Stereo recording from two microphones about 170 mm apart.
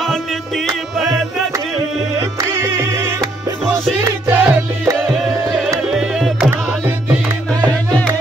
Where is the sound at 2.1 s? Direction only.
15° right (ahead or behind).